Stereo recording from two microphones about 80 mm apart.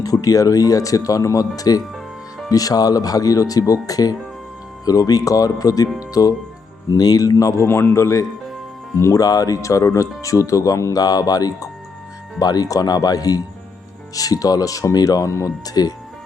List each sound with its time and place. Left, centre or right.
0.0 s speech: left
7.6 s a man's voice: left